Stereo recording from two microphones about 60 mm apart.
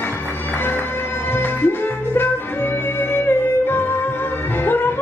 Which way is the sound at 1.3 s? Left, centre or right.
Left.